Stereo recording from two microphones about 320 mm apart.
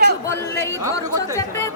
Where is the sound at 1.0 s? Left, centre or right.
Centre.